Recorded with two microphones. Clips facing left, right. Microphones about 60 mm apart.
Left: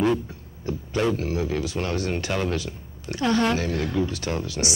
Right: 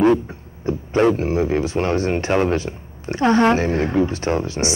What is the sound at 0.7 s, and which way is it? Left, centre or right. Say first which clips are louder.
Speech: right 7 dB; right.